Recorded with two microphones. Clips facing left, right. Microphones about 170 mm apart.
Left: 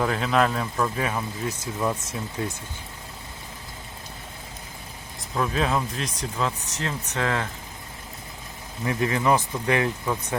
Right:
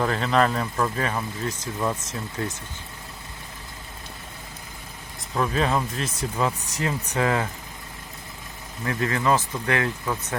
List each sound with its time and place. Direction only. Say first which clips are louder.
0.0 s speech: right 1 dB; 5° left (ahead or behind)
5.3 s speech: right 1 dB; centre (ahead or behind)
8.8 s speech: left 1 dB; 15° left (ahead or behind)